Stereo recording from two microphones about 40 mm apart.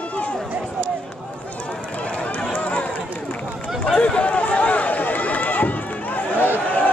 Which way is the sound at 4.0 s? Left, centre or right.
Left.